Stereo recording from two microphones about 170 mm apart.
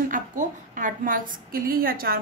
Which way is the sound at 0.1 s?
50° right (ahead or behind).